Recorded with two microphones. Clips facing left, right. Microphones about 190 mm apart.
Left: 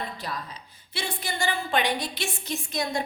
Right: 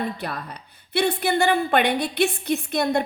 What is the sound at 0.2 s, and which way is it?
A woman's voice, 60° right (ahead or behind).